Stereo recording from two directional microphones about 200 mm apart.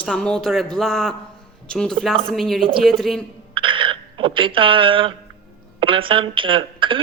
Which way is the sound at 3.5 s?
25° right (ahead or behind).